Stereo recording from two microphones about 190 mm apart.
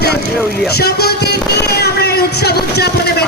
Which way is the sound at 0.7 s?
55° left (ahead or behind).